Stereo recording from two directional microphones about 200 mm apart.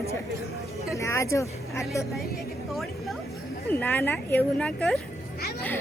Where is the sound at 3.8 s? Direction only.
10° left (ahead or behind).